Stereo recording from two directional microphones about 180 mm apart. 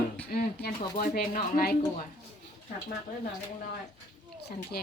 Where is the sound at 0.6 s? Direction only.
50° left (ahead or behind).